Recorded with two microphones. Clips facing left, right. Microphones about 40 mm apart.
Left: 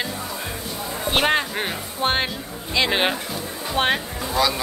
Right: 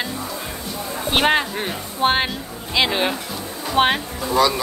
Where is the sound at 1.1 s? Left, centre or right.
Centre.